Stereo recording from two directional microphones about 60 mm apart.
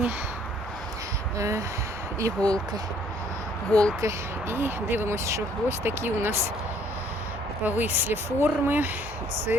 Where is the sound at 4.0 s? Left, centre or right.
Right.